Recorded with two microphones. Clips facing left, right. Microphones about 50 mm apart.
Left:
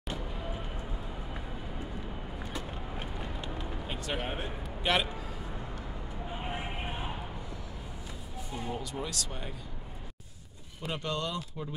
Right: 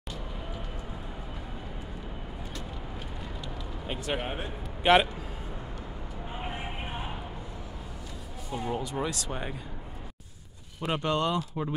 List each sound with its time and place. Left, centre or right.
3.8 s speech: centre
4.9 s speech: right
8.5 s speech: right
10.9 s speech: right